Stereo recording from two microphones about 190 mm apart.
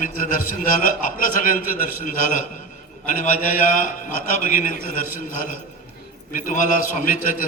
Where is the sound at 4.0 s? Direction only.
45° left (ahead or behind).